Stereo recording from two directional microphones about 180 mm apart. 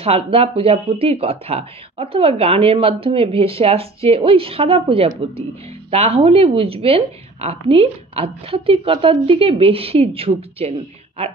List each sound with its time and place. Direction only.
0.0 s speech: 35° right (ahead or behind)